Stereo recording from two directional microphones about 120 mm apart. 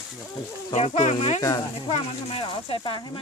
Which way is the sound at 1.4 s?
30° left (ahead or behind).